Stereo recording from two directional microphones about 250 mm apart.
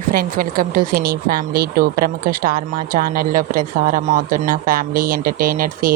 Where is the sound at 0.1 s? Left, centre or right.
Right.